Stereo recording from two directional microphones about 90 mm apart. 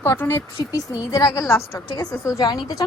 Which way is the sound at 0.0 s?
25° left (ahead or behind).